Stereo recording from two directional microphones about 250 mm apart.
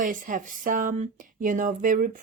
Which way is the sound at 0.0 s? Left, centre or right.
Right.